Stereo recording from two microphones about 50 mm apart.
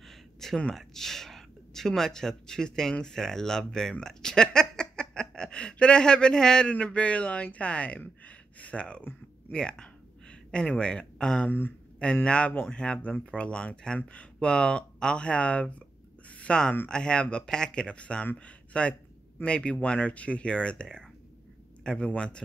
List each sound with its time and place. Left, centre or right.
0.7 s speech: centre; by 8.0 s left
8.0 s a sound: left
9.5 s speech: centre
11.4 s speech: left
12.3 s speech: left